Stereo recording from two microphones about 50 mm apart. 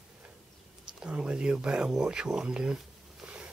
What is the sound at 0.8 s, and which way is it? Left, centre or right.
Speech, centre.